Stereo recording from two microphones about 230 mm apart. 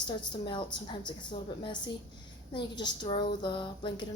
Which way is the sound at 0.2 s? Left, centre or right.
Centre.